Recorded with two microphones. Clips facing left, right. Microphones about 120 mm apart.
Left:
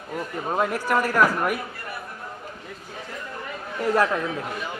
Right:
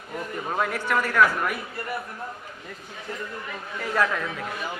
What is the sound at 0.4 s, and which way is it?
Speech, 20° left (ahead or behind).